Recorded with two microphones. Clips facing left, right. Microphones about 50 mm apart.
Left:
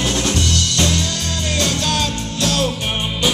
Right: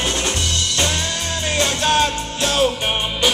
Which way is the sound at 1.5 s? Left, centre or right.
Right.